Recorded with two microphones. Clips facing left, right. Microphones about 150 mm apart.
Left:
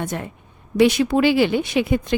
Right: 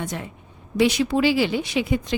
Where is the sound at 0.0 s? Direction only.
50° left (ahead or behind).